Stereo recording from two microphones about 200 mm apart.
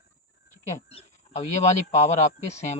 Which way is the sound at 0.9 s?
30° left (ahead or behind).